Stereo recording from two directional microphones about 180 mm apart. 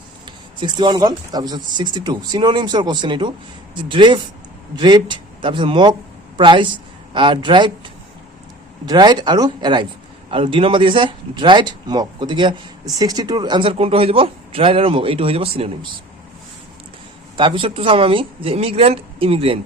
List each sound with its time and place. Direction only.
0.3 s speech: 25° right (ahead or behind)
8.9 s speech: 25° right (ahead or behind)
17.3 s speech: 25° right (ahead or behind)